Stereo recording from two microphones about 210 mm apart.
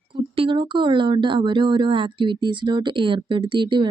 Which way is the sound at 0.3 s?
25° right (ahead or behind).